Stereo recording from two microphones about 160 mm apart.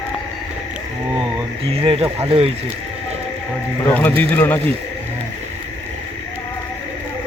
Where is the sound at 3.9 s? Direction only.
10° left (ahead or behind).